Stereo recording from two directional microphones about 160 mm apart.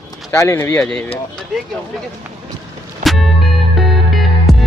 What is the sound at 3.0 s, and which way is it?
Music, centre (ahead or behind).